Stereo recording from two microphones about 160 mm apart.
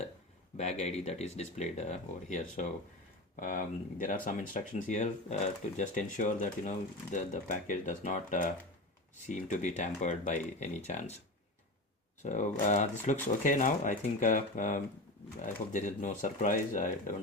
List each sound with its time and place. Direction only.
0.5 s speech: 45° left (ahead or behind)
12.2 s speech: 50° left (ahead or behind)